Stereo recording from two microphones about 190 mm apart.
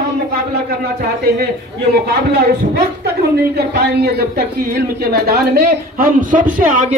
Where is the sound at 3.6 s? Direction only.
55° right (ahead or behind).